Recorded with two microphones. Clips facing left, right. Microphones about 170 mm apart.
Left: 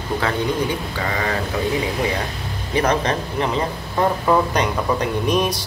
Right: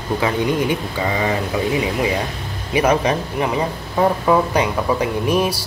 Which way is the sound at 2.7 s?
10° right (ahead or behind).